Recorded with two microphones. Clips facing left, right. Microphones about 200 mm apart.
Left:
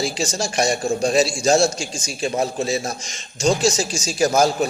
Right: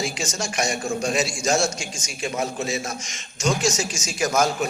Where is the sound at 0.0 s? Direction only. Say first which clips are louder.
Left 4 dB; 35° left (ahead or behind).